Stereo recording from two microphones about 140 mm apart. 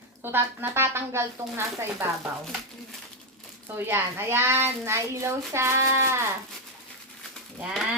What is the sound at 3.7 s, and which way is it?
A woman's voice, 15° right (ahead or behind).